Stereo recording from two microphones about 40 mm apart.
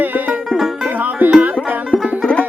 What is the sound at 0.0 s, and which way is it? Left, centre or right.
Music, right.